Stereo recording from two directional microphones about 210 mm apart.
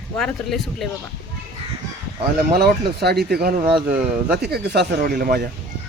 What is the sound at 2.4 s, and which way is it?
Speech, 50° right (ahead or behind).